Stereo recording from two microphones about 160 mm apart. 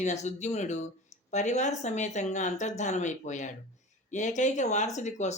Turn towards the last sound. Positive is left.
turn(degrees=45)  # may be behind; listen again after turning